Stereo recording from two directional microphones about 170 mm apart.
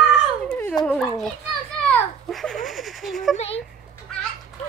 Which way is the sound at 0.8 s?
5° left (ahead or behind).